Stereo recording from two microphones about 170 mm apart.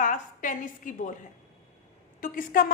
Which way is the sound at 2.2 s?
55° left (ahead or behind).